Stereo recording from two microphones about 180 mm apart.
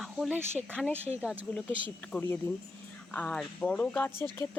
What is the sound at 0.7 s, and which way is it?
Speech, 5° left (ahead or behind).